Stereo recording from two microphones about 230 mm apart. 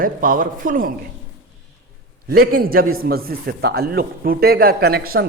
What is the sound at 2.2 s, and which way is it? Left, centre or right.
Speech, right.